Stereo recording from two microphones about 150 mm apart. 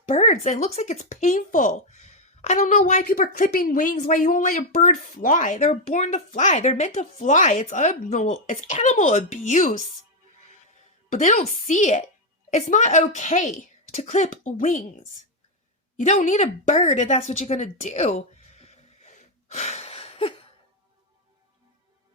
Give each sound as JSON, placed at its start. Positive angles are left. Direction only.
{"t": 0.0, "sound": "speech", "side_deg": 50}
{"t": 3.0, "sound": "speech", "side_deg": 70}
{"t": 11.1, "sound": "a woman's voice", "side_deg": 55}
{"t": 16.0, "sound": "a sound", "side_deg": 55}